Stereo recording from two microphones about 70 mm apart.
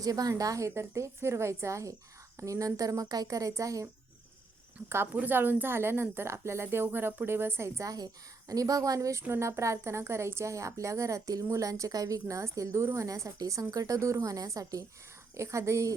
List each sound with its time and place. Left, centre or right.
0.0 s a woman's voice: right
0.7 s a woman's voice: right
5.1 s a woman's voice: right
7.9 s a woman's voice: right
15.4 s a woman's voice: right